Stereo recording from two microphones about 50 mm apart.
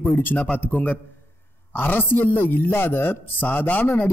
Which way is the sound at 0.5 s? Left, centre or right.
Left.